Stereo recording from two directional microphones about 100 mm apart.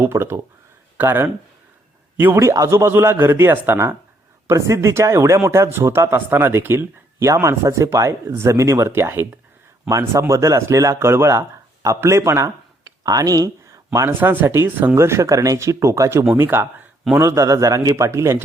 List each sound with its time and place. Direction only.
0.0 s speech: 25° right (ahead or behind)
13.9 s speech: 25° right (ahead or behind)